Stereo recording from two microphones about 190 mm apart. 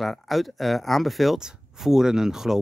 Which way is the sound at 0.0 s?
Centre (ahead or behind).